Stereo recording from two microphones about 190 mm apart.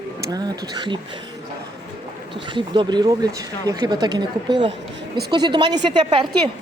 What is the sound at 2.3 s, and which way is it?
Speech, 25° right (ahead or behind).